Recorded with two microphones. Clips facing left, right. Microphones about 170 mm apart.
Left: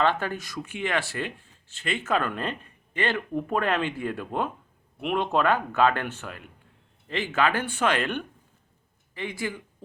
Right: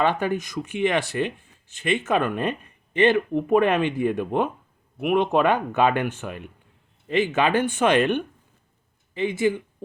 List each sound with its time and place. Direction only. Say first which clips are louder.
0.0 s speech: right 3 dB; 15° right (ahead or behind)